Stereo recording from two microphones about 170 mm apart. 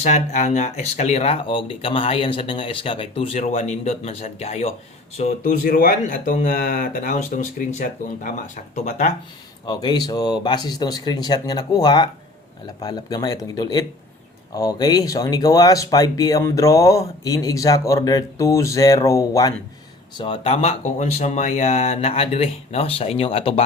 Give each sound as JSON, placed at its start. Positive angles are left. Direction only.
{"t": 0.0, "sound": "speech", "side_deg": 45}
{"t": 9.6, "sound": "speech", "side_deg": 25}
{"t": 20.1, "sound": "speech", "side_deg": 30}